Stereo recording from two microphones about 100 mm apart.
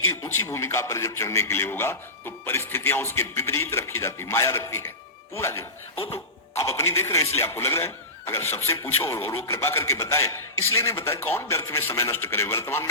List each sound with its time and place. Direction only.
0.3 s a man's voice: 25° left (ahead or behind)
6.0 s cough: 75° left (ahead or behind)
6.7 s a man's voice: 25° left (ahead or behind)